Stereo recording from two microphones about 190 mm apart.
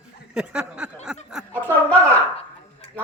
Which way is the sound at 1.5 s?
10° left (ahead or behind).